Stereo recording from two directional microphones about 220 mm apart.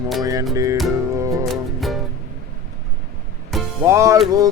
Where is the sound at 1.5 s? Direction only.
Centre (ahead or behind).